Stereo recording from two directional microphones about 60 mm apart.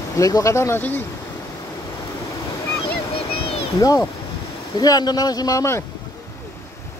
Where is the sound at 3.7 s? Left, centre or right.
Left.